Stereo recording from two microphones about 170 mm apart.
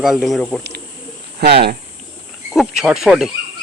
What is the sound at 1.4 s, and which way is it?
Speech, 75° right (ahead or behind).